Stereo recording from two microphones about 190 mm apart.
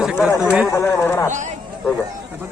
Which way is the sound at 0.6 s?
15° left (ahead or behind).